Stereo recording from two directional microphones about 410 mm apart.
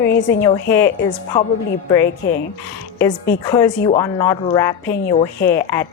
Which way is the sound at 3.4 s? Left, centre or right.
Centre.